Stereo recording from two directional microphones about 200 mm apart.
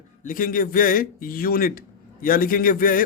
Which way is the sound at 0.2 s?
45° left (ahead or behind).